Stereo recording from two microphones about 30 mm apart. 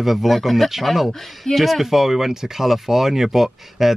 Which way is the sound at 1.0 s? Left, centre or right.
Centre.